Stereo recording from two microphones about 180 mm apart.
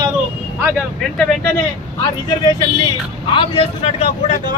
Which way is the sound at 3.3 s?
30° left (ahead or behind).